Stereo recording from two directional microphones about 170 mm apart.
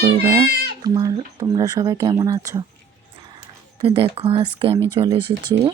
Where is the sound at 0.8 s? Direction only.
20° right (ahead or behind).